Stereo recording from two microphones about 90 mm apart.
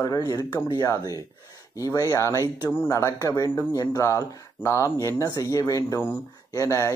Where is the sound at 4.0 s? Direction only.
35° left (ahead or behind).